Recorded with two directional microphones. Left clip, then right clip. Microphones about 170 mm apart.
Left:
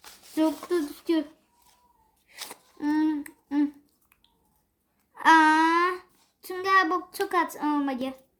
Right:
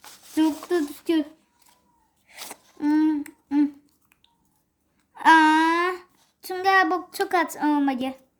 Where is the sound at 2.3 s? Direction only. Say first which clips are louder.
Right 1 dB; 40° right (ahead or behind).